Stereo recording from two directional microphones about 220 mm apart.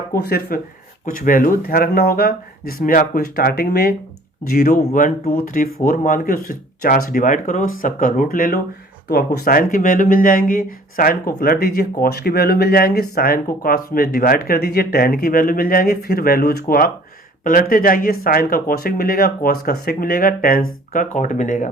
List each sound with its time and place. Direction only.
0.1 s speech: 45° left (ahead or behind)